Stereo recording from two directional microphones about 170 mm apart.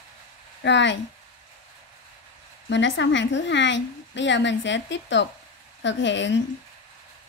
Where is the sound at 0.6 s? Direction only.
90° left.